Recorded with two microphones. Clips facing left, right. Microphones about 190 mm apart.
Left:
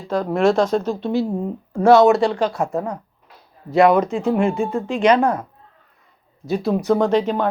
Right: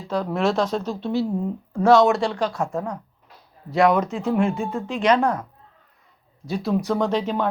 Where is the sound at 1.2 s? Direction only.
25° left (ahead or behind).